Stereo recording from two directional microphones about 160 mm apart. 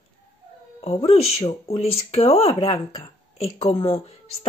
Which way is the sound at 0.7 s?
40° left (ahead or behind).